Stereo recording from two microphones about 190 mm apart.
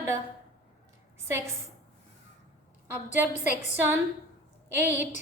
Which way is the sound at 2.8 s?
10° right (ahead or behind).